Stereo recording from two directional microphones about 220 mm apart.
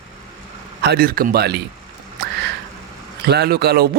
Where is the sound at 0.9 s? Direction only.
45° right (ahead or behind).